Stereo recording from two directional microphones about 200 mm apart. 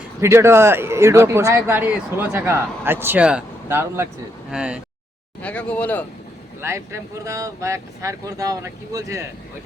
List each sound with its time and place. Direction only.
0.2 s a man's voice: 15° right (ahead or behind)
5.4 s speech: 5° left (ahead or behind)
6.6 s a man's voice: 15° right (ahead or behind)